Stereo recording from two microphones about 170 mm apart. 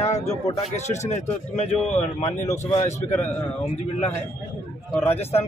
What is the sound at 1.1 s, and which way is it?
Speech, 40° left (ahead or behind).